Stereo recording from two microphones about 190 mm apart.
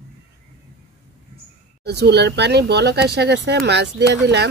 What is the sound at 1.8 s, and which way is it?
Speech, 60° right (ahead or behind).